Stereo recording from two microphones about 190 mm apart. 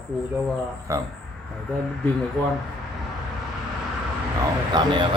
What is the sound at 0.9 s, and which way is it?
Speech, 15° right (ahead or behind).